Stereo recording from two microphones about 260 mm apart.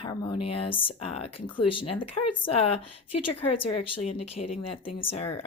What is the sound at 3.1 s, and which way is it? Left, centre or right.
Speech, left.